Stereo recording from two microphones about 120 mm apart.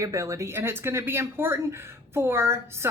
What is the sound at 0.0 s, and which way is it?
Speech, 25° right (ahead or behind).